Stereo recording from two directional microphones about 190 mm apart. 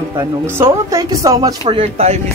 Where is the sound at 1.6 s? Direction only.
30° right (ahead or behind).